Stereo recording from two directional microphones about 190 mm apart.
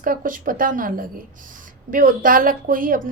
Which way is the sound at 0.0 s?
45° right (ahead or behind).